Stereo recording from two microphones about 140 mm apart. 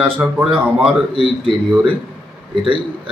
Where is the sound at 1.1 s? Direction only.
40° right (ahead or behind).